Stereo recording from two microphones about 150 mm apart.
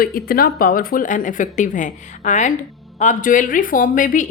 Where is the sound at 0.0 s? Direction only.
75° left (ahead or behind).